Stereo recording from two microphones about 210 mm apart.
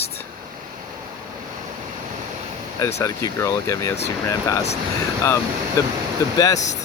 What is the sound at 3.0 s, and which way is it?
Speech, 15° left (ahead or behind).